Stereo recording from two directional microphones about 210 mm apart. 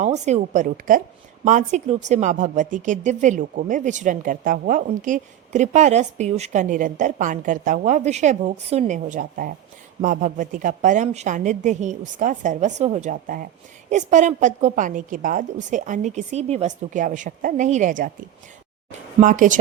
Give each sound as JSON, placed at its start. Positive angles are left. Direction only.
{"t": 0.0, "sound": "a woman's voice", "side_deg": -35}